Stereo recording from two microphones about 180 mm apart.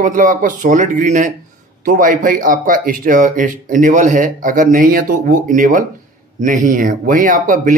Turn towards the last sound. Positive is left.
turn(degrees=-45)  # may be behind; listen again after turning